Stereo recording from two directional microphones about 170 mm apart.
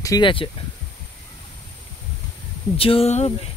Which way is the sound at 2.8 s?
35° left (ahead or behind).